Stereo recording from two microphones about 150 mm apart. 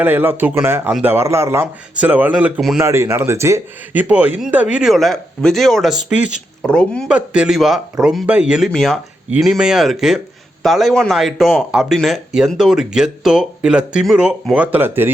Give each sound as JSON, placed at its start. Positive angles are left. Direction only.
{"t": 0.0, "sound": "a man's voice", "side_deg": -15}